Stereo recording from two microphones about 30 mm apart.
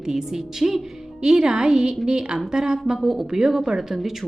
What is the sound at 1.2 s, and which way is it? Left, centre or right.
A woman's voice, right.